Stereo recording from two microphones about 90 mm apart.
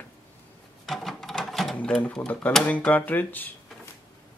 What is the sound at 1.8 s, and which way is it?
Speech, 10° left (ahead or behind).